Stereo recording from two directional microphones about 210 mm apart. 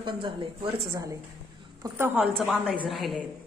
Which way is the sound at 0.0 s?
25° right (ahead or behind).